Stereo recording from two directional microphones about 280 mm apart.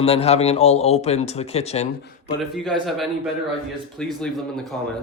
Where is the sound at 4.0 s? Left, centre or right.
Centre.